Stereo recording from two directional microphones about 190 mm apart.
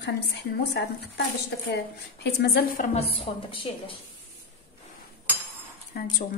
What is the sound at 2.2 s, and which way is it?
A woman's voice, 60° left (ahead or behind).